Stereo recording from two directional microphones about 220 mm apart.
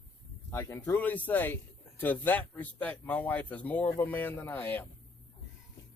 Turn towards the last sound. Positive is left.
turn(degrees=10)  # may be behind; listen again after turning